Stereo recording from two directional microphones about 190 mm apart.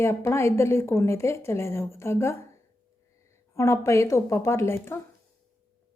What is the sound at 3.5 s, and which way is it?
Speech, 15° left (ahead or behind).